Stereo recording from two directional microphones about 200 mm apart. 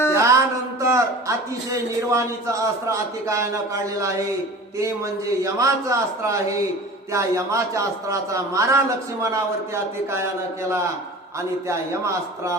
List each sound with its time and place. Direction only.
0.1 s speech: 15° right (ahead or behind)
5.4 s a man's voice: 15° right (ahead or behind)
11.7 s a man's voice: 15° right (ahead or behind)